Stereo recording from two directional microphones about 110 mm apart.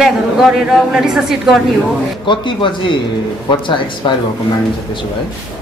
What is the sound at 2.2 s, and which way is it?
Speech, 45° left (ahead or behind).